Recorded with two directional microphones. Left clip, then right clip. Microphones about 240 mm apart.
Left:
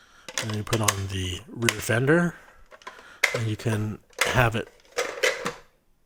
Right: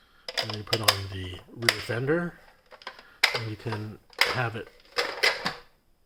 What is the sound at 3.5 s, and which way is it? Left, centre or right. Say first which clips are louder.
Speech: left 5 dB; left.